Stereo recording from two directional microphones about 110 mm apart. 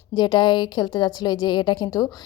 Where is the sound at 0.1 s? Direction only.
40° left (ahead or behind).